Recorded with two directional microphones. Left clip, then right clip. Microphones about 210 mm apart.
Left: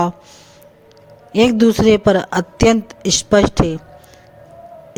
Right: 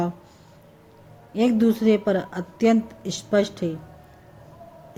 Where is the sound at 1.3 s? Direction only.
50° left (ahead or behind).